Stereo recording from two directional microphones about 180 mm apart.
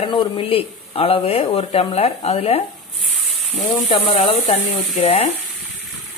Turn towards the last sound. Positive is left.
turn(degrees=35)  # may be behind; listen again after turning